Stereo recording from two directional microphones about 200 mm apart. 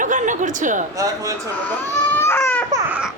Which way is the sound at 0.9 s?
15° right (ahead or behind).